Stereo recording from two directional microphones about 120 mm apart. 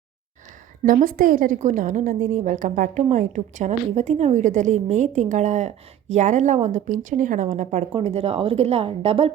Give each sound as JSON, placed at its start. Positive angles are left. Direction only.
{"t": 0.9, "sound": "a woman's voice", "side_deg": -80}
{"t": 7.9, "sound": "speech", "side_deg": -55}